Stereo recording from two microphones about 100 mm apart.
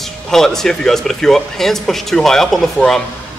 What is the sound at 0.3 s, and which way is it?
Speech, 5° left (ahead or behind).